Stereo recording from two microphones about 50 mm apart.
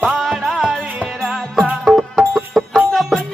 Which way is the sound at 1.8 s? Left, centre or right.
Centre.